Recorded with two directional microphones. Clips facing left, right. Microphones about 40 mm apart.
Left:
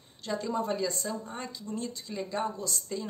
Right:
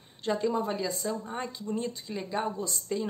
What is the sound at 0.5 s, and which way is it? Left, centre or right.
Speech, centre.